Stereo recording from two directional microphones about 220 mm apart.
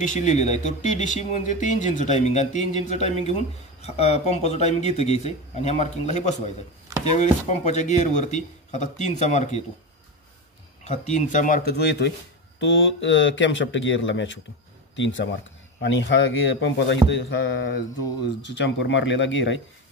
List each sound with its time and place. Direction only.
0.0 s speech: 35° left (ahead or behind)
10.8 s speech: 30° left (ahead or behind); by 17.2 s 55° left (ahead or behind)
18.5 s speech: 50° left (ahead or behind)